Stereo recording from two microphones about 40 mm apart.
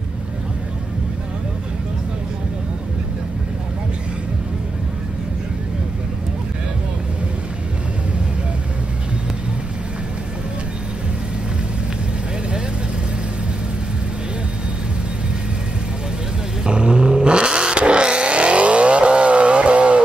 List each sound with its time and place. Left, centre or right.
16.6 s vehicle: right